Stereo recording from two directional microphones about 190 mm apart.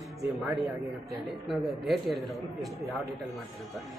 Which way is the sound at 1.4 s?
Centre (ahead or behind).